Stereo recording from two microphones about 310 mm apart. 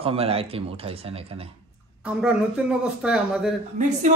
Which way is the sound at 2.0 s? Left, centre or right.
Centre.